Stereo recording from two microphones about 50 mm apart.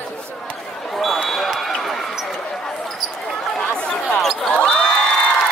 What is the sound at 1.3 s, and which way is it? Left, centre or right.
Run, centre.